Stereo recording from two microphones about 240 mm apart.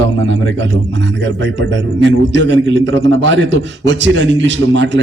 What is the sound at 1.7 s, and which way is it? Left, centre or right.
A man's voice, right.